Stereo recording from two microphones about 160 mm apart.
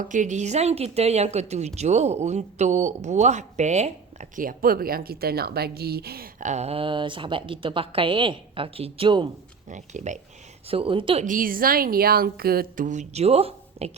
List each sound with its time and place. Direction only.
0.0 s speech: 50° right (ahead or behind); by 6.5 s 70° right (ahead or behind)
6.5 s a woman's voice: 40° right (ahead or behind)
9.6 s speech: 50° right (ahead or behind)
10.7 s a woman's voice: 35° right (ahead or behind)
11.3 s a woman's voice: 60° right (ahead or behind); by 13.9 s 40° right (ahead or behind)